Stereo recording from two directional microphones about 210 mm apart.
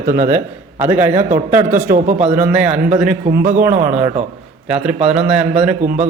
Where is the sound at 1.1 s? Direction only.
35° right (ahead or behind).